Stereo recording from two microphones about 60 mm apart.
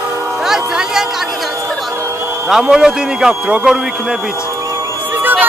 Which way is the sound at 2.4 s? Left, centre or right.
Centre.